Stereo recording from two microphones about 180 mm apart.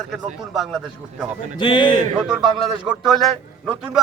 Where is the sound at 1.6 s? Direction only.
25° left (ahead or behind).